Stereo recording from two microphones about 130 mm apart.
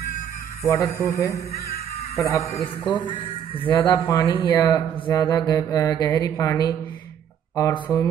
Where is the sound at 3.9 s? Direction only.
25° left (ahead or behind).